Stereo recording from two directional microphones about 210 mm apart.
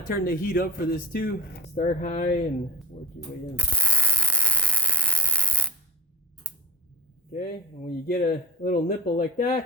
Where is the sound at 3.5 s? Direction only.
5° left (ahead or behind).